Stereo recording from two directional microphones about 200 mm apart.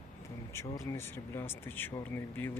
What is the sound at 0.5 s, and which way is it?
Speech, 15° left (ahead or behind).